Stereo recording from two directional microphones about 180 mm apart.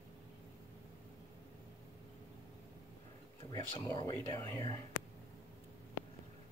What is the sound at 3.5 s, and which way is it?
Speech, 20° left (ahead or behind).